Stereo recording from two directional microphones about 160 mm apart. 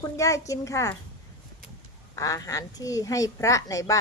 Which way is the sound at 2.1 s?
20° left (ahead or behind).